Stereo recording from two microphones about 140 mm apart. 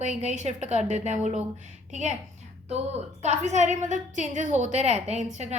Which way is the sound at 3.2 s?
55° right (ahead or behind).